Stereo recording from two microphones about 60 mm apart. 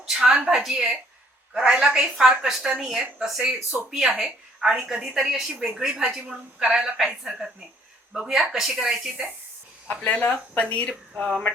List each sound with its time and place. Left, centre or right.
0.0 s a woman's voice: centre
9.9 s speech: left